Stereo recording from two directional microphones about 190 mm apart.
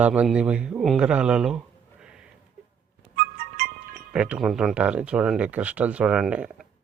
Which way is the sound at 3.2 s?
55° right (ahead or behind).